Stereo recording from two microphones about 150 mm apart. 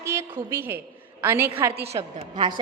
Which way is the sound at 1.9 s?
30° right (ahead or behind).